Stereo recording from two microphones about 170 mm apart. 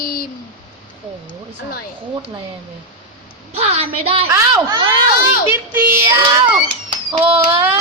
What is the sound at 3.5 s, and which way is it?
Speech, 35° right (ahead or behind).